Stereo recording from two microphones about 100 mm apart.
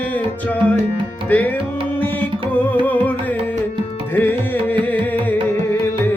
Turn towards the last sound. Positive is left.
turn(degrees=20)  # may be behind; listen again after turning